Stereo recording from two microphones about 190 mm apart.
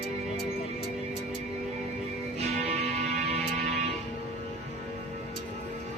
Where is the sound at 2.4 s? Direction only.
35° right (ahead or behind).